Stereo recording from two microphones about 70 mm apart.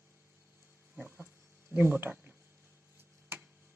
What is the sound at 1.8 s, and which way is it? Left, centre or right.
Speech, right.